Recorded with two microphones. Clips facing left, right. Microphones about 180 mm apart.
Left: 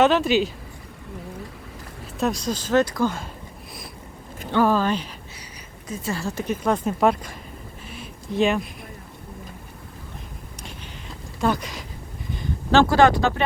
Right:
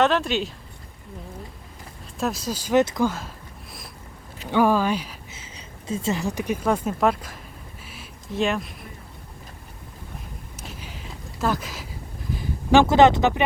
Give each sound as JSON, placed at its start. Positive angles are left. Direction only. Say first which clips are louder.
{"t": 0.0, "sound": "speech", "louder": "left 3 dB", "side_deg": 0}
{"t": 2.1, "sound": "speech", "louder": "left 3 dB", "side_deg": 0}
{"t": 4.5, "sound": "speech", "louder": "even", "side_deg": -10}
{"t": 5.9, "sound": "speech", "louder": "right 3 dB", "side_deg": -25}
{"t": 7.9, "sound": "a sound", "louder": "left 4 dB", "side_deg": -5}
{"t": 11.3, "sound": "speech", "louder": "left 2 dB", "side_deg": 0}
{"t": 12.3, "sound": "a sound", "louder": "right 2 dB", "side_deg": -5}
{"t": 12.8, "sound": "speech", "louder": "even", "side_deg": -20}